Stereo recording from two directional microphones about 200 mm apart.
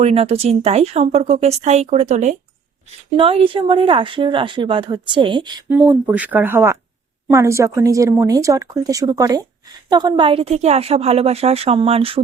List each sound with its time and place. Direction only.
0.0 s speech: 30° right (ahead or behind)
5.6 s speech: 10° right (ahead or behind); by 12.2 s 30° right (ahead or behind)